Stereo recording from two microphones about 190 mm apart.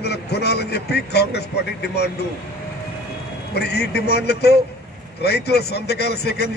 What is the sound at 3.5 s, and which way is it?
A man's voice, 60° left (ahead or behind).